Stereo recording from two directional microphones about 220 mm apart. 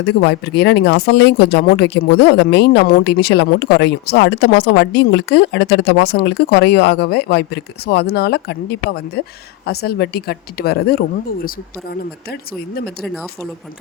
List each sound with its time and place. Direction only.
0.0 s speech: 50° left (ahead or behind)